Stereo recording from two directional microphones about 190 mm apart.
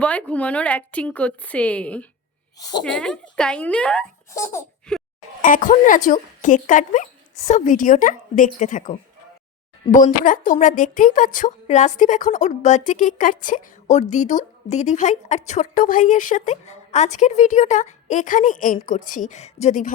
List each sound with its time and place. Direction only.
0.0 s a woman's voice: 5° left (ahead or behind)
4.9 s a sound: 5° left (ahead or behind)
5.4 s a woman's voice: 45° left (ahead or behind)